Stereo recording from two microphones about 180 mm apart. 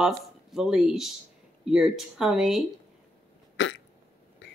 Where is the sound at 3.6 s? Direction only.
90° left.